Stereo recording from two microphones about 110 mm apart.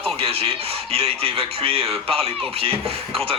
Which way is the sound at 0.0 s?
60° right (ahead or behind).